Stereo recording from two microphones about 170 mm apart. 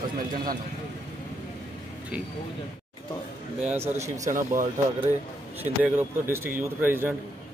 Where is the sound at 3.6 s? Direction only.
15° right (ahead or behind).